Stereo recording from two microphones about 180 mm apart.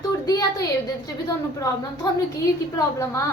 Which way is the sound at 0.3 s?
20° left (ahead or behind).